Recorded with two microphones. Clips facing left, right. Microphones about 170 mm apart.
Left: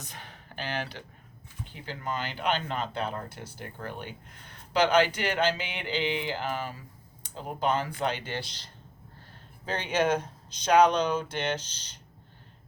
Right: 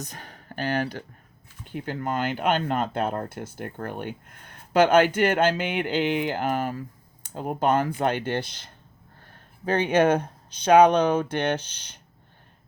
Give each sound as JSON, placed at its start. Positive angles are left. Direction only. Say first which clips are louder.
{"t": 0.0, "sound": "speech", "louder": "right 6 dB", "side_deg": -40}